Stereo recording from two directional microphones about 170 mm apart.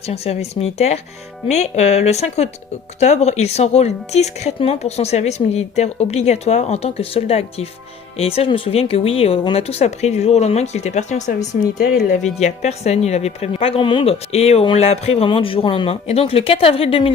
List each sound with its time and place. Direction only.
0.1 s a woman's voice: 40° left (ahead or behind)
11.8 s speech: 65° left (ahead or behind)
12.2 s a woman's voice: 40° left (ahead or behind)